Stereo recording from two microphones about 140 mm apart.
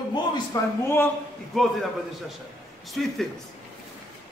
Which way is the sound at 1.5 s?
Centre (ahead or behind).